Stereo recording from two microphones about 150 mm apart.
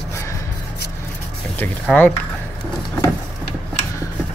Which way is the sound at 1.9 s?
5° left (ahead or behind).